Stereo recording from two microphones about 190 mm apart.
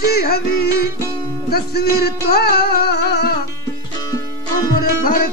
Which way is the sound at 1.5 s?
55° left (ahead or behind).